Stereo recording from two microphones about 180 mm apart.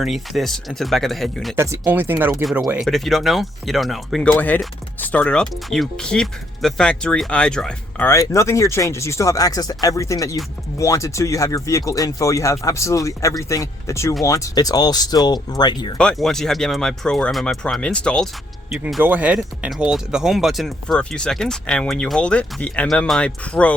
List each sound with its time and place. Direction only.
0.0 s speech: centre (ahead or behind)
1.5 s speech: 15° right (ahead or behind)
2.4 s speech: centre (ahead or behind); by 16.0 s 25° left (ahead or behind)
16.0 s speech: 5° left (ahead or behind)